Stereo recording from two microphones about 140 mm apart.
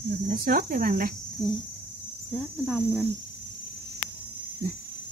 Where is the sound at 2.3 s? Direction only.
5° left (ahead or behind).